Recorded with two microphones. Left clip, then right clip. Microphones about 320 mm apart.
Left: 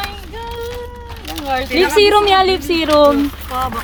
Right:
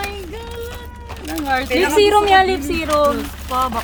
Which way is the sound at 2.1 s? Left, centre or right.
Left.